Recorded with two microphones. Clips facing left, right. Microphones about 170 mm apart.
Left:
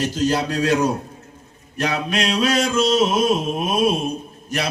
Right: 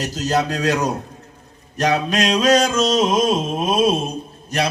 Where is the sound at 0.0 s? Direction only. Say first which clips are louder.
Even; 40° right (ahead or behind).